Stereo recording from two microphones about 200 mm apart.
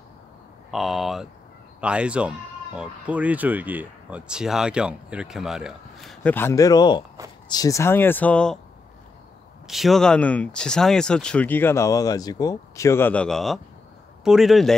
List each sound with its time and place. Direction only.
0.7 s speech: centre (ahead or behind)
9.7 s speech: centre (ahead or behind)